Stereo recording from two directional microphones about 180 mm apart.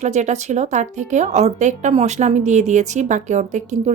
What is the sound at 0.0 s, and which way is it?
A woman's voice, 40° right (ahead or behind).